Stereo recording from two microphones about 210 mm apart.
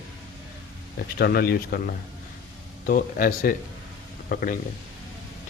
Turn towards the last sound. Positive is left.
turn(degrees=45)  # may be behind; listen again after turning